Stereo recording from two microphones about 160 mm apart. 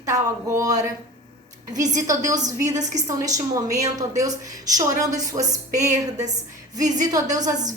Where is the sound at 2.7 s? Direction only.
45° right (ahead or behind).